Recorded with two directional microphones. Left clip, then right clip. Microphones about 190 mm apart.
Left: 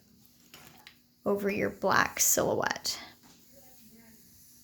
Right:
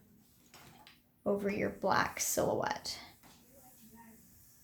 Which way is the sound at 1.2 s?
30° left (ahead or behind).